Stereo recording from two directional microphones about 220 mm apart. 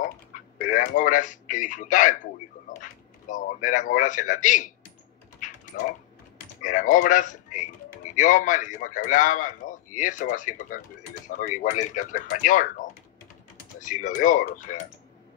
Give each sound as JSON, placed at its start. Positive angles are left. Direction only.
{"t": 0.0, "sound": "speech", "side_deg": 35}